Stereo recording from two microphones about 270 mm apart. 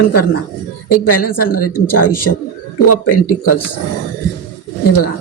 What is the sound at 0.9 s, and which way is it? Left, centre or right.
Speech, left.